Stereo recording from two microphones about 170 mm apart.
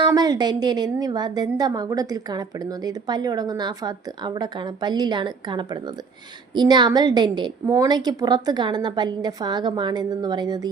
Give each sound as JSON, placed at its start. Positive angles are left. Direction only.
{"t": 0.0, "sound": "a woman's voice", "side_deg": -25}